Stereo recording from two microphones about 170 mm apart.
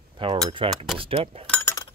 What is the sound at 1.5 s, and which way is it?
Chink, 15° left (ahead or behind).